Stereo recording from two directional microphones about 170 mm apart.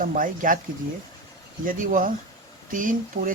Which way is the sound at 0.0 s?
50° right (ahead or behind).